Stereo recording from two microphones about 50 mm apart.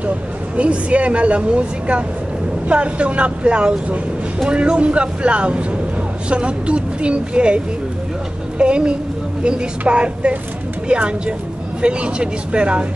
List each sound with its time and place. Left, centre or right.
0.6 s speech: right